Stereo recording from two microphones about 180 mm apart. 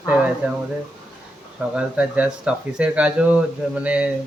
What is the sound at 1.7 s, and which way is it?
A man's voice, 5° right (ahead or behind).